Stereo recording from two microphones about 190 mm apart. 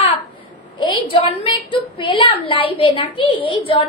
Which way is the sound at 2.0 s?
30° left (ahead or behind).